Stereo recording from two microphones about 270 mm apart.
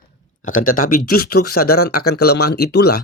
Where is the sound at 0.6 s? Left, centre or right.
Left.